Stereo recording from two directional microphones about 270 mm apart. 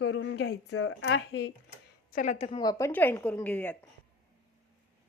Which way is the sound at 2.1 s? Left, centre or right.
Left.